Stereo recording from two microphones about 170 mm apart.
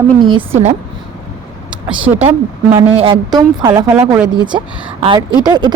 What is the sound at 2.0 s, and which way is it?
Speech, 10° right (ahead or behind).